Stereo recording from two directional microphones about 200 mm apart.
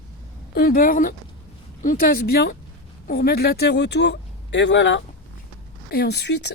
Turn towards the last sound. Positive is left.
turn(degrees=60)  # may be behind; listen again after turning